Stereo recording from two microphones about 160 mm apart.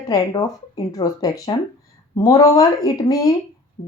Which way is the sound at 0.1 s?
20° left (ahead or behind).